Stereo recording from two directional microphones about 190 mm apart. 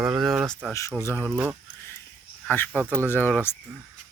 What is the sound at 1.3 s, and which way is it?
Speech, 5° right (ahead or behind).